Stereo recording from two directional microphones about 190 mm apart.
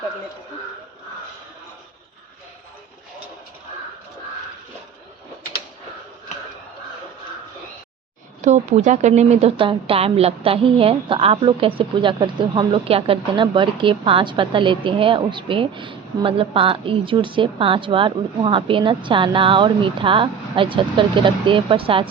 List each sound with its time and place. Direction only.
8.4 s a woman's voice: 40° right (ahead or behind)